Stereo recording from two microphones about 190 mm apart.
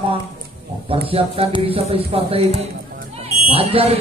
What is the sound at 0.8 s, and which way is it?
Speech, 30° right (ahead or behind).